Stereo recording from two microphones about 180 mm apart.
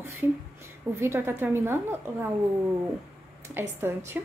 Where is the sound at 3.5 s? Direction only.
15° right (ahead or behind).